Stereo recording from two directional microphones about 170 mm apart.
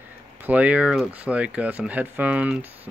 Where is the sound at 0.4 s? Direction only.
10° right (ahead or behind).